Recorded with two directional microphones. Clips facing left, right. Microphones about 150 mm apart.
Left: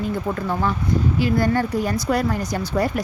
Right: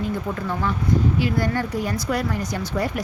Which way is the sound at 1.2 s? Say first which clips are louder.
Left 3 dB; 40° left (ahead or behind).